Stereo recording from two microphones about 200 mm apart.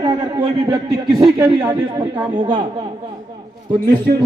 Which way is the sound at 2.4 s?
25° right (ahead or behind).